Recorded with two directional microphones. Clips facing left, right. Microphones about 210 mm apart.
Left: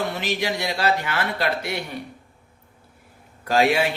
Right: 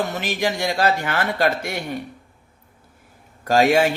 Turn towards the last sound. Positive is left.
turn(degrees=-45)  # may be behind; listen again after turning